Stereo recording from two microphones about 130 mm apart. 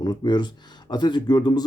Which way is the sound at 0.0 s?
35° left (ahead or behind).